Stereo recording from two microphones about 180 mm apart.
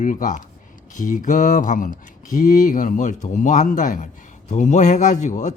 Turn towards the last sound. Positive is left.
turn(degrees=40)  # may be behind; listen again after turning